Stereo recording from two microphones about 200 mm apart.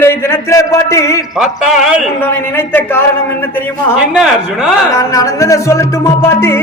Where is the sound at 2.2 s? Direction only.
10° left (ahead or behind).